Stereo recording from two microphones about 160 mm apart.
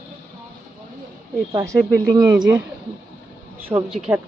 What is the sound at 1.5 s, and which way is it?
Speech, 20° right (ahead or behind).